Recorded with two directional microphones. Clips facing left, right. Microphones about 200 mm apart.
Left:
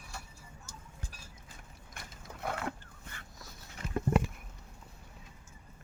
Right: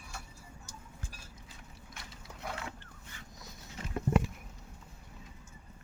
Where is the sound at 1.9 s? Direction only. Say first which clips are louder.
Left 3 dB; 55° left (ahead or behind).